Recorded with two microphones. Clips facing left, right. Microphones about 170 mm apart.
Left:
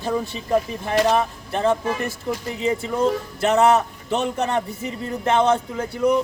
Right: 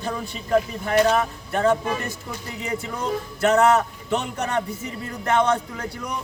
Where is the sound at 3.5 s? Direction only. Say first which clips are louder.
Left 1 dB; 20° left (ahead or behind).